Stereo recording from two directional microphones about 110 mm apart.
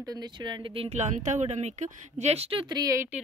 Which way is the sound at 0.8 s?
80° right.